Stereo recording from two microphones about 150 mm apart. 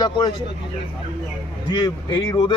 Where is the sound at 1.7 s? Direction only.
30° left (ahead or behind).